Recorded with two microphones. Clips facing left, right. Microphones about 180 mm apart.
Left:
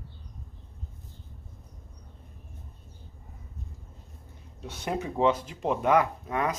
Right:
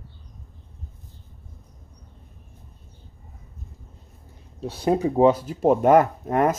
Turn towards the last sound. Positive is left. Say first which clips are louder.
# right 8 dB
turn(degrees=-50)  # may be behind; listen again after turning